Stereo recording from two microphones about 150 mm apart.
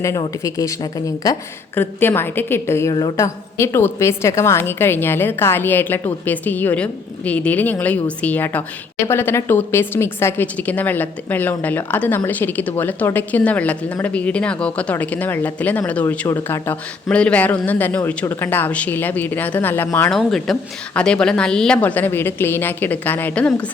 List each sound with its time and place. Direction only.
0.4 s a woman's voice: 20° left (ahead or behind)
1.7 s speech: 15° left (ahead or behind)
20.1 s speech: centre (ahead or behind)